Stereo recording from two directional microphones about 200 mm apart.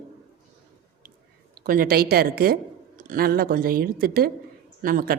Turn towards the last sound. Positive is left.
turn(degrees=-45)  # may be behind; listen again after turning